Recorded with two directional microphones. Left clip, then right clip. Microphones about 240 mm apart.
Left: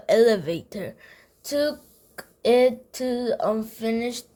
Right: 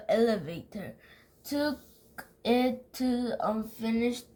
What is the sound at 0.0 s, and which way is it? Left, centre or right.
A woman's voice, left.